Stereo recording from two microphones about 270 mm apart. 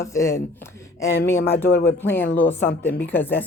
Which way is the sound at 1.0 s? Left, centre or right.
Left.